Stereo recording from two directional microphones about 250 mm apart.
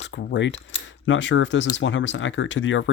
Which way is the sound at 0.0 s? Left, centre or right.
Left.